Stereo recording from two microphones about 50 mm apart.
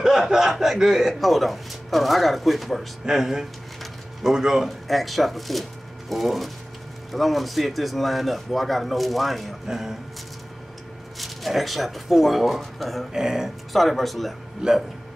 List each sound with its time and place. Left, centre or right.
0.0 s a man's voice: centre
3.1 s speech: centre
4.6 s a man's voice: centre
9.7 s speech: centre
11.1 s speech: centre
13.1 s speech: centre
13.7 s a man's voice: centre
14.6 s speech: centre